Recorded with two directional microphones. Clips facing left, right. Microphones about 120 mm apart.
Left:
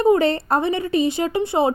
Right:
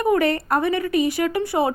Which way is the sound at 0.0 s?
25° left (ahead or behind).